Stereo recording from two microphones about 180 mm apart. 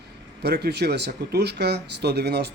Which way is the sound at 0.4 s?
65° right (ahead or behind).